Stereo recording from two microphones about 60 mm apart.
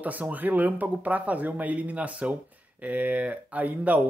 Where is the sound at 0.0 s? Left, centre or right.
Right.